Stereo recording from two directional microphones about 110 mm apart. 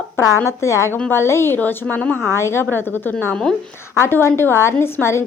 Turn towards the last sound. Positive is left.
turn(degrees=25)  # may be behind; listen again after turning